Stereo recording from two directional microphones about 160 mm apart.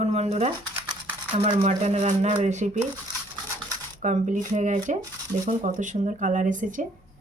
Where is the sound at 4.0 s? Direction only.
50° right (ahead or behind).